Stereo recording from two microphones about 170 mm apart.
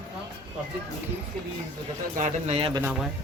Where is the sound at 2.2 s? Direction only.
45° right (ahead or behind).